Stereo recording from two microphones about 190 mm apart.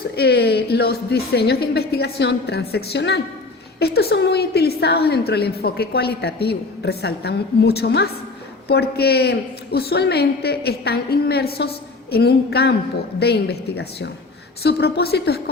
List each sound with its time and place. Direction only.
0.2 s a woman's voice: 60° left (ahead or behind)